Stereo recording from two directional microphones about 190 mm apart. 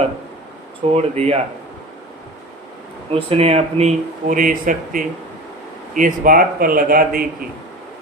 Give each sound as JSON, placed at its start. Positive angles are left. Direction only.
{"t": 0.9, "sound": "speech", "side_deg": -35}
{"t": 3.1, "sound": "speech", "side_deg": -35}